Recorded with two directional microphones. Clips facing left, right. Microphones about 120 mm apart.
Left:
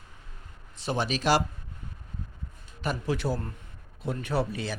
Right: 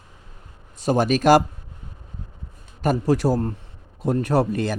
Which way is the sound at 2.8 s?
40° right (ahead or behind).